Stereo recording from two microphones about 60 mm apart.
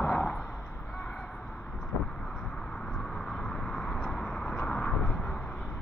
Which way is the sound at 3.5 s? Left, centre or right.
Centre.